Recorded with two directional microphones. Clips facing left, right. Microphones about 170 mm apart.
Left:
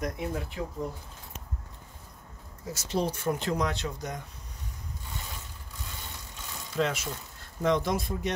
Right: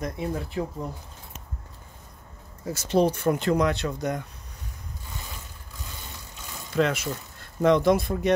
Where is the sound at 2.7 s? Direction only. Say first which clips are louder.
Right 8 dB; 60° right (ahead or behind).